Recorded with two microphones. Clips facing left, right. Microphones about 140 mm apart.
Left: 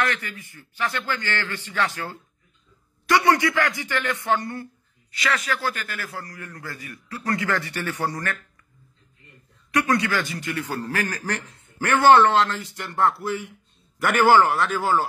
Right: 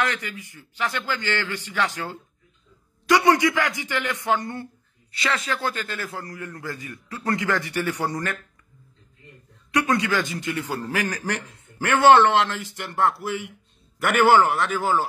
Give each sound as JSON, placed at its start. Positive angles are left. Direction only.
{"t": 0.0, "sound": "a man's voice", "side_deg": -15}
{"t": 9.8, "sound": "a man's voice", "side_deg": -20}
{"t": 12.7, "sound": "a man's voice", "side_deg": -5}